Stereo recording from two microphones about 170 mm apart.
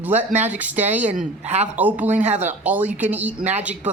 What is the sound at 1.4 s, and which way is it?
Speech, 40° right (ahead or behind).